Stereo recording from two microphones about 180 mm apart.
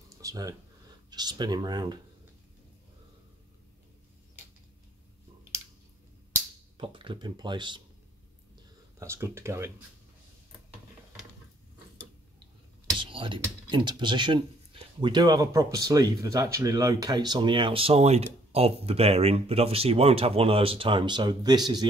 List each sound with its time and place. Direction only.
0.2 s speech: 20° right (ahead or behind)
6.8 s speech: 30° right (ahead or behind)
9.0 s speech: 15° right (ahead or behind)
13.0 s speech: 30° right (ahead or behind)